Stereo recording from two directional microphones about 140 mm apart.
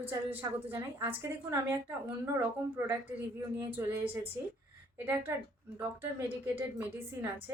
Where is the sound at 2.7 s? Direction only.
15° right (ahead or behind).